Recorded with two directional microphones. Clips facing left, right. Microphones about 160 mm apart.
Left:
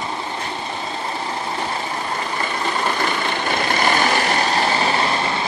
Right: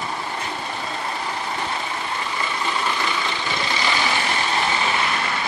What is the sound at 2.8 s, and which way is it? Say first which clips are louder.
Vehicle: left 3 dB; 45° left (ahead or behind).